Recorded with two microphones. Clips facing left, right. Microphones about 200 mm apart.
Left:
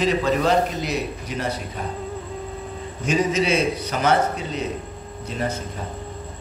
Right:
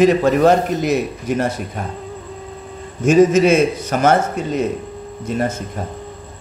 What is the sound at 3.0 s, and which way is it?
Speech, 45° right (ahead or behind).